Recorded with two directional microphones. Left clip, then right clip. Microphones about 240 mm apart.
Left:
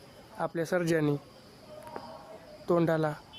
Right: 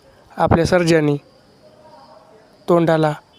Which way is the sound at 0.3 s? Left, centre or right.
Right.